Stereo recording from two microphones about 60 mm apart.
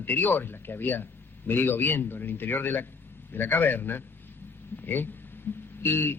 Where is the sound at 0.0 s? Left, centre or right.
Left.